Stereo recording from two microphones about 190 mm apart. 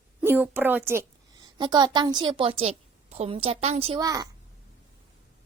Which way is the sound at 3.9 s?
20° right (ahead or behind).